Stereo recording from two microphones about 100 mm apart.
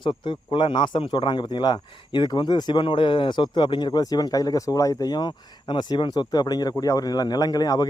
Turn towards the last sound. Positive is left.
turn(degrees=40)  # may be behind; listen again after turning